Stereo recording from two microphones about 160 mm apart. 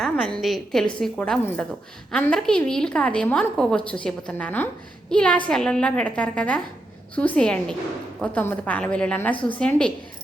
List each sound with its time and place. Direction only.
0.0 s a woman's voice: 5° left (ahead or behind)
9.3 s a woman's voice: 30° left (ahead or behind)
9.6 s a woman's voice: 5° left (ahead or behind)